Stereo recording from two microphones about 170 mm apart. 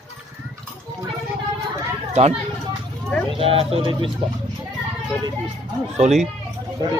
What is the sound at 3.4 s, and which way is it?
Speech, 35° right (ahead or behind).